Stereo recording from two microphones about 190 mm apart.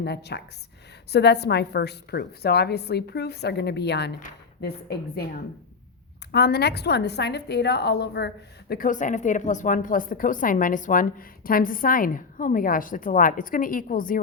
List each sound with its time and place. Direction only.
0.0 s a woman's voice: 60° left (ahead or behind)
6.3 s a woman's voice: 60° left (ahead or behind)
8.7 s a woman's voice: 45° left (ahead or behind)